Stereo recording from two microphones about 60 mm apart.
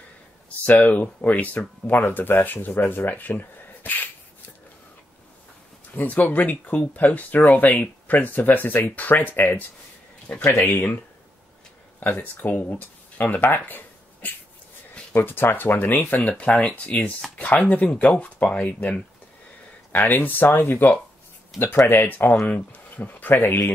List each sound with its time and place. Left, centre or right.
0.7 s speech: left
5.9 s speech: left
12.0 s speech: left
16.2 s speech: centre; by 23.7 s left